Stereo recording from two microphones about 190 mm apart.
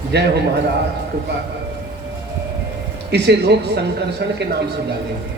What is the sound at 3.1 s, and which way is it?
A man's voice, 60° right (ahead or behind).